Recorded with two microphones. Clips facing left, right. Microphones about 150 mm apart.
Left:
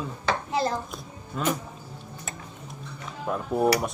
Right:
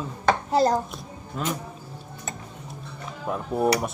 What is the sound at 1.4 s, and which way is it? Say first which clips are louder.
Speech: left 2 dB; centre (ahead or behind).